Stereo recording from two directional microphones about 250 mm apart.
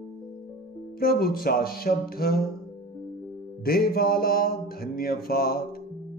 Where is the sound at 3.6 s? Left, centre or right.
Left.